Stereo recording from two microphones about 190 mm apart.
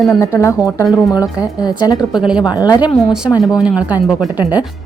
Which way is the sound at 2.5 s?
20° left (ahead or behind).